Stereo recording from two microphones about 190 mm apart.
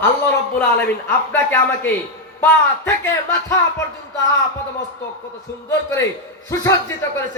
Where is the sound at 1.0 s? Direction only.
10° left (ahead or behind).